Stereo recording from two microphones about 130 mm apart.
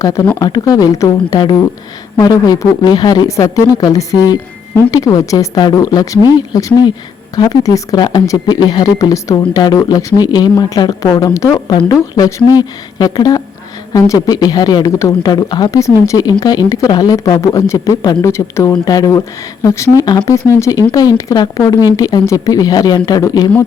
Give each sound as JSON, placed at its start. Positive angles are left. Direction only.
{"t": 0.3, "sound": "speech", "side_deg": 30}